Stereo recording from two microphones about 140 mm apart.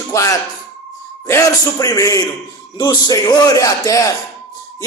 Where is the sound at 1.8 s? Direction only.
25° left (ahead or behind).